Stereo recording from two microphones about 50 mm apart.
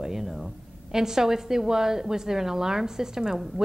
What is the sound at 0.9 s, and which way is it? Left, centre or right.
Speech, centre.